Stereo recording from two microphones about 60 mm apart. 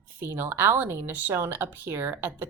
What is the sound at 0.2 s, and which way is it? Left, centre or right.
A woman's voice, right.